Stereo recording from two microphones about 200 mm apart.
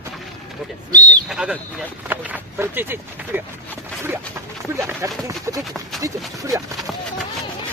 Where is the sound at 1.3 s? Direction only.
5° right (ahead or behind).